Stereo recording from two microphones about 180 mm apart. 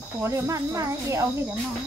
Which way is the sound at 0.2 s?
15° right (ahead or behind).